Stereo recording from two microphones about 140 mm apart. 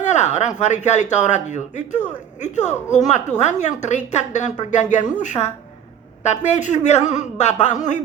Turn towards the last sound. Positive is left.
turn(degrees=60)  # may be behind; listen again after turning